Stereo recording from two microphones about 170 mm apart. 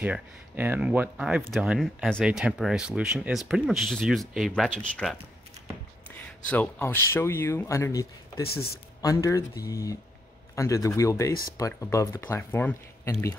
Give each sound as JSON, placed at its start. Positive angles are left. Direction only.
{"t": 0.0, "sound": "speech", "side_deg": -10}
{"t": 6.4, "sound": "speech", "side_deg": 10}
{"t": 8.5, "sound": "speech", "side_deg": 65}
{"t": 9.0, "sound": "a man's voice", "side_deg": 20}